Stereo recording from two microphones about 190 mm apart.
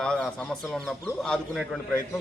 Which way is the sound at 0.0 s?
5° left (ahead or behind).